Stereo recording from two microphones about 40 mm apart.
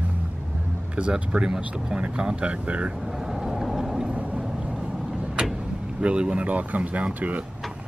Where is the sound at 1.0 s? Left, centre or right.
Right.